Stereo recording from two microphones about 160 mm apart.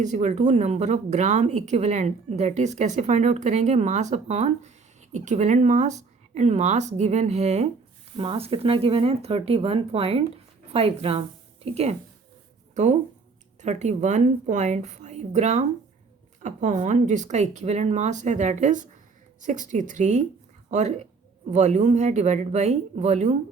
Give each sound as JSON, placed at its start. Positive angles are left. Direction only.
{"t": 0.0, "sound": "speech", "side_deg": -45}